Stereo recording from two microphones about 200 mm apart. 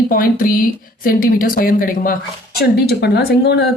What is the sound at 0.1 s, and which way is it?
Speech, 45° left (ahead or behind).